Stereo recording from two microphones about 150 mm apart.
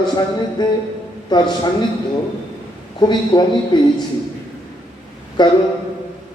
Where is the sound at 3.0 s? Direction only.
30° left (ahead or behind).